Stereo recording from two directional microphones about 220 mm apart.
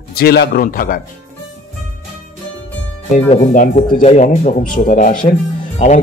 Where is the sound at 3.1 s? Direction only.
30° left (ahead or behind).